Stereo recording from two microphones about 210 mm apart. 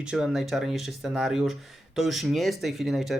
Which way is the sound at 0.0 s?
5° right (ahead or behind).